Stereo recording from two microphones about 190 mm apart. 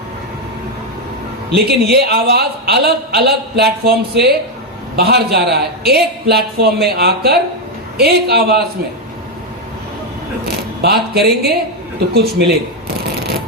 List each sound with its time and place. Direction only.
1.5 s a man's voice: 60° right (ahead or behind)
10.8 s a man's voice: 55° right (ahead or behind)